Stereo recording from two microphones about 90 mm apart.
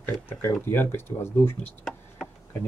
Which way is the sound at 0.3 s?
25° left (ahead or behind).